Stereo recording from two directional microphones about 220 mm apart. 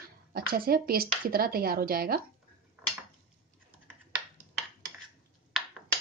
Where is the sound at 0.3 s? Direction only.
45° right (ahead or behind).